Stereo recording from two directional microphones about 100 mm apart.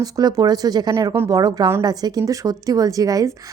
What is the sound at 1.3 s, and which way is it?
A woman's voice, 40° right (ahead or behind).